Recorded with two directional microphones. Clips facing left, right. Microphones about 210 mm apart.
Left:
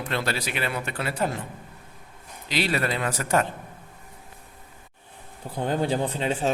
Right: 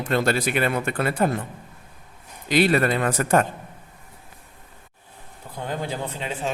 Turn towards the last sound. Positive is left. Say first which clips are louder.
# left 4 dB
turn(degrees=35)  # may be behind; listen again after turning